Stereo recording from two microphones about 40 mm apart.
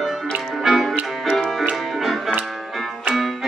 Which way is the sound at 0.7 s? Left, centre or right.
Centre.